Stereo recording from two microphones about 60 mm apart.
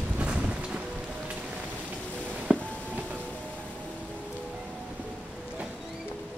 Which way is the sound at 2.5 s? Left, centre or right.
Centre.